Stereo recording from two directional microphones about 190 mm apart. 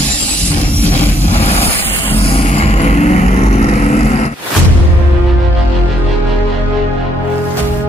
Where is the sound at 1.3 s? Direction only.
35° left (ahead or behind).